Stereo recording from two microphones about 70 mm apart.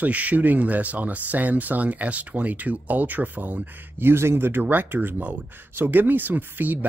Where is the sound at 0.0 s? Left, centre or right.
Right.